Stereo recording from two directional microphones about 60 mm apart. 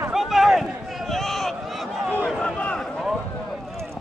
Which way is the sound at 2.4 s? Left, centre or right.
Centre.